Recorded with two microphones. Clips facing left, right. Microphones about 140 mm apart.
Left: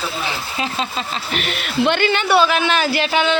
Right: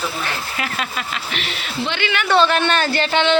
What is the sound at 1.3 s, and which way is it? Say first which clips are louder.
Speech: left 3 dB; 50° left (ahead or behind).